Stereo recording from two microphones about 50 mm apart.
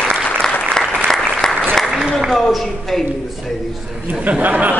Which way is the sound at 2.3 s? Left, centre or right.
Centre.